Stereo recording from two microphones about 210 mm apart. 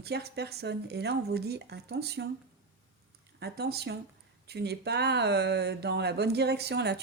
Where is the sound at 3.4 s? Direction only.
50° right (ahead or behind).